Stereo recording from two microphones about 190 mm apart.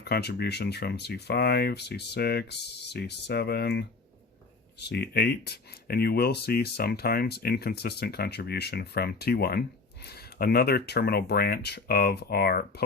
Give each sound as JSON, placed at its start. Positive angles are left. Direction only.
{"t": 0.0, "sound": "speech", "side_deg": 60}